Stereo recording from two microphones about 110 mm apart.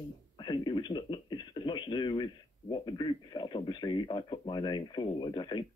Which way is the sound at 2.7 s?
45° left (ahead or behind).